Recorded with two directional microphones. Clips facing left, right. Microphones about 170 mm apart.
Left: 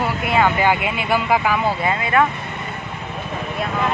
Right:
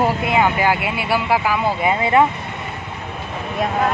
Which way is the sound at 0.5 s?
5° right (ahead or behind).